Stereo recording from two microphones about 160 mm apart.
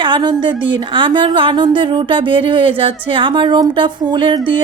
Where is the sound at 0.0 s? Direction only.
30° right (ahead or behind).